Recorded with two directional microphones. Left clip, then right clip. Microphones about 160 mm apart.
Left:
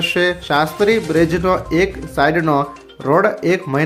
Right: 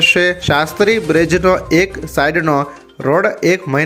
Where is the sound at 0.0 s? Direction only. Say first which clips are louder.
Right 5 dB; 20° right (ahead or behind).